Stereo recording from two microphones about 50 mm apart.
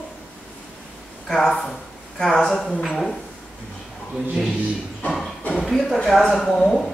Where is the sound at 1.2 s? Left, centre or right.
Centre.